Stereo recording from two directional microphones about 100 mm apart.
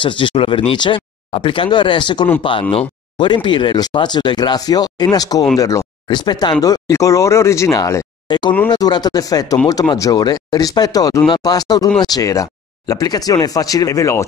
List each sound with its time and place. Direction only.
0.0 s speech: 55° left (ahead or behind); by 5.9 s 35° left (ahead or behind)
6.0 s speech: 50° left (ahead or behind)
6.6 s speech: 35° left (ahead or behind)